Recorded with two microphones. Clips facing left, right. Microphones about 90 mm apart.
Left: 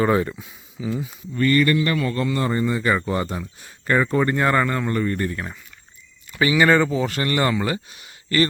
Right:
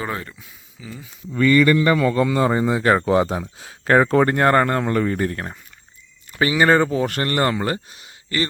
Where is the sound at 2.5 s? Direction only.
90° right; by 4.9 s 55° right (ahead or behind).